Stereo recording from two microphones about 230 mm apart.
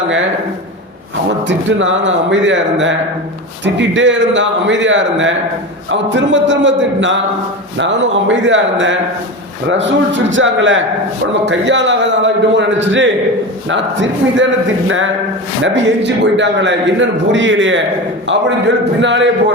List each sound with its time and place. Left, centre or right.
1.3 s a man's voice: right